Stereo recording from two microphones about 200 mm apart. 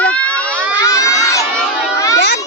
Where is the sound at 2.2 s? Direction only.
60° left (ahead or behind).